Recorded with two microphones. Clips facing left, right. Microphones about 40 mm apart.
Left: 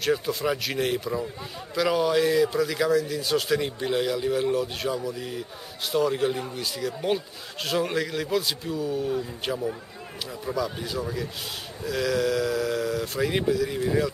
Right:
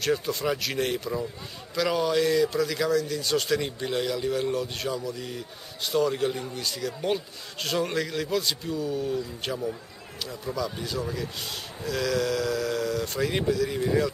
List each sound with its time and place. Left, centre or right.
0.0 s a man's voice: centre